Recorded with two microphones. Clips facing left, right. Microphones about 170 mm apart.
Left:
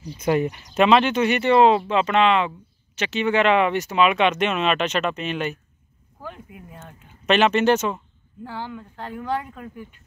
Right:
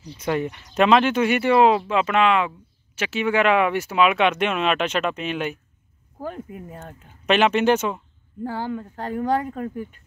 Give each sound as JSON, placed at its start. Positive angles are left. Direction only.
{"t": 0.0, "sound": "speech", "side_deg": 10}
{"t": 0.8, "sound": "speech", "side_deg": -5}
{"t": 6.2, "sound": "speech", "side_deg": -40}
{"t": 7.2, "sound": "speech", "side_deg": -10}
{"t": 8.5, "sound": "speech", "side_deg": -40}